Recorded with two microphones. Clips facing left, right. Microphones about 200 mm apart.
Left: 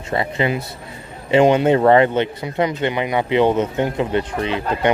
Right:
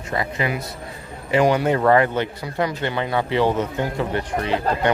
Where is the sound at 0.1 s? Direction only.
25° left (ahead or behind).